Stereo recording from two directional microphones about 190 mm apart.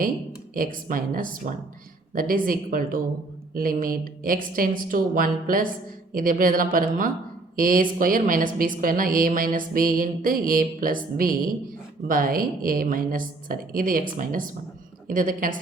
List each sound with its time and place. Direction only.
0.5 s a woman's voice: 45° right (ahead or behind)